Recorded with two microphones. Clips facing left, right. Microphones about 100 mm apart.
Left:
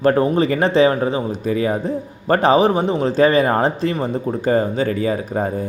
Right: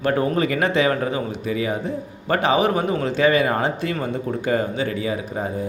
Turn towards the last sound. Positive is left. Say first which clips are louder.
# left 5 dB
turn(degrees=45)  # may be behind; listen again after turning